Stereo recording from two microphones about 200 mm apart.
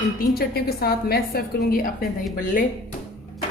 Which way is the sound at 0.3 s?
50° left (ahead or behind).